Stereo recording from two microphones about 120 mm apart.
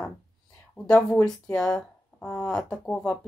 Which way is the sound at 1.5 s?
5° left (ahead or behind).